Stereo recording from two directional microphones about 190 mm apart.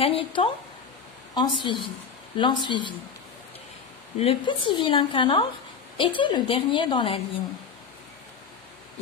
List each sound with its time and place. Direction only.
0.0 s a woman's voice: 25° left (ahead or behind)
4.2 s a woman's voice: 30° left (ahead or behind)